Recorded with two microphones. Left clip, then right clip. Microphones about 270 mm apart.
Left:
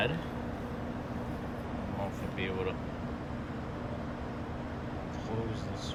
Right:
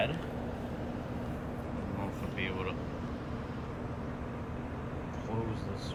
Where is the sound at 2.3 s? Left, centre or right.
Left.